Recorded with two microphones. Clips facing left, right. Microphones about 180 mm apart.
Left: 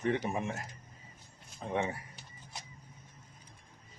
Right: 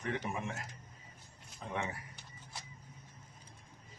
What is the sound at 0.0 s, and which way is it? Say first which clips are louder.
Speech: left 6 dB; 30° left (ahead or behind).